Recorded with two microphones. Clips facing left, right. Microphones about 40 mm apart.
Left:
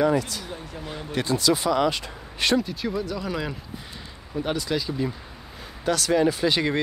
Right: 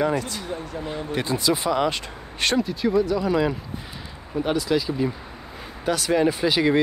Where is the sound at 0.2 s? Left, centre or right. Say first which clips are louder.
Right 3 dB; right.